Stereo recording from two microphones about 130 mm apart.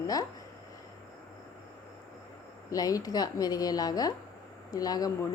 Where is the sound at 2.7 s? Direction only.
30° left (ahead or behind).